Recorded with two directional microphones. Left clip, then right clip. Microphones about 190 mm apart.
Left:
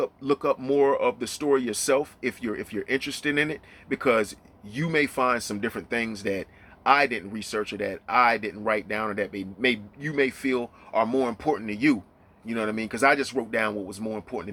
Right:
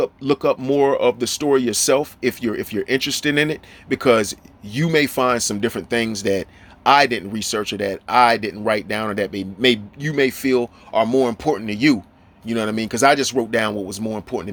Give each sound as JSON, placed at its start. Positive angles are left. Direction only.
{"t": 0.0, "sound": "speech", "side_deg": -35}